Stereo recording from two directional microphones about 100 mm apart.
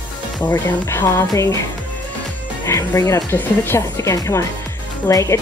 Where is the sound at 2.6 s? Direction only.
30° left (ahead or behind).